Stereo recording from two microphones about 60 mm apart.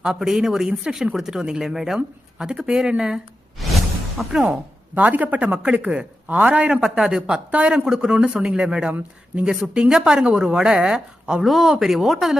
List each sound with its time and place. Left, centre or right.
0.0 s speech: centre
4.3 s speech: centre